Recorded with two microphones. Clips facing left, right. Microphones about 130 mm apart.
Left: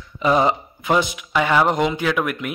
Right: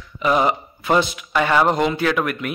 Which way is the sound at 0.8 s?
15° left (ahead or behind).